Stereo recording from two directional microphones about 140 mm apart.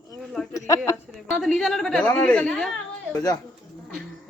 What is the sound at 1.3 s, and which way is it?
A woman's voice, centre (ahead or behind).